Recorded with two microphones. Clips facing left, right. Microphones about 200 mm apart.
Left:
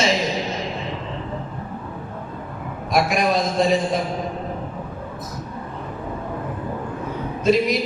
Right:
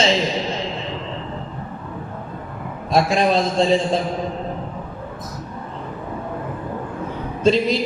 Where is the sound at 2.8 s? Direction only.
30° right (ahead or behind).